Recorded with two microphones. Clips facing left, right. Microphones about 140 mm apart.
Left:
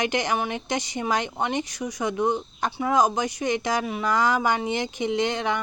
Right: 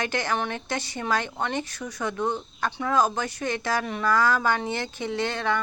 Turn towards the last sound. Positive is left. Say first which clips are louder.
# left 2 dB
turn(degrees=15)  # may be behind; listen again after turning